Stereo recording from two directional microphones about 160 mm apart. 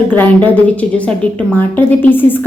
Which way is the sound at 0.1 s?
10° left (ahead or behind).